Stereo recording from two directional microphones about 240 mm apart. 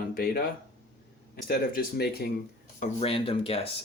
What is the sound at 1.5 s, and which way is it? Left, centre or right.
Speech, left.